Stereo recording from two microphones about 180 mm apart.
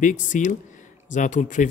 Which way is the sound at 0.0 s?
45° left (ahead or behind).